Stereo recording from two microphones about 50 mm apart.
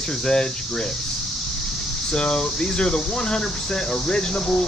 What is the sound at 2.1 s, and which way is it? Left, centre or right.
Speech, centre.